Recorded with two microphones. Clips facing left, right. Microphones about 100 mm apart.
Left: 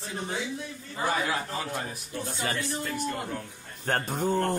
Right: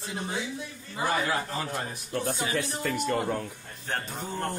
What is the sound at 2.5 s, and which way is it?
Speech, 65° right (ahead or behind).